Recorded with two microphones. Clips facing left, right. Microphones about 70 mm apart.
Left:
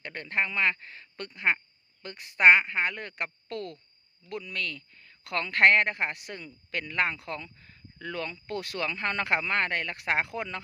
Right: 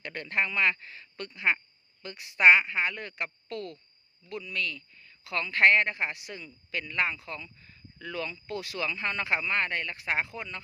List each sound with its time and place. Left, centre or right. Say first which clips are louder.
0.0 s a woman's voice: even; left